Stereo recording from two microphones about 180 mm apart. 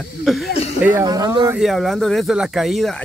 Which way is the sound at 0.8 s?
15° right (ahead or behind).